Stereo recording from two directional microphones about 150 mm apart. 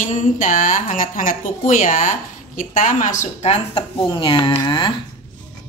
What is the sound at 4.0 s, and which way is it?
Speech, 35° left (ahead or behind).